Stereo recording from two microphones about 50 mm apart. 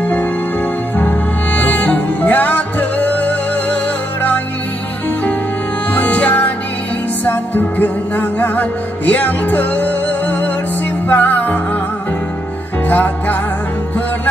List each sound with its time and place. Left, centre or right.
0.0 s music: left
5.9 s music: left
12.8 s music: left